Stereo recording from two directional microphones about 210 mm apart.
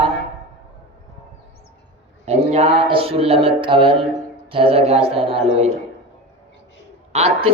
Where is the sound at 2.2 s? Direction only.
30° right (ahead or behind).